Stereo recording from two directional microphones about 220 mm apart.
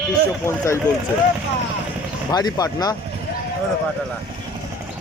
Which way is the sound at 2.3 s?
15° left (ahead or behind).